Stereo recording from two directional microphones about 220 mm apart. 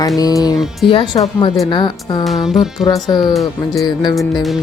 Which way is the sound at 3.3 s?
Centre (ahead or behind).